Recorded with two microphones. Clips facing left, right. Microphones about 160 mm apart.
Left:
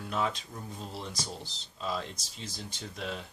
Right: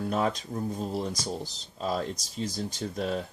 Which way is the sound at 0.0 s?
45° right (ahead or behind).